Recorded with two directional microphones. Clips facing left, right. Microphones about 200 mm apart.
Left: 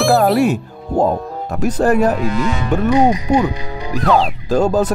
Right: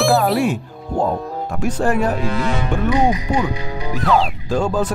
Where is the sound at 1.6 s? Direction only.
40° left (ahead or behind).